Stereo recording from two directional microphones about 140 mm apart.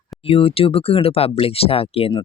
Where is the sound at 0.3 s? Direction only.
45° left (ahead or behind).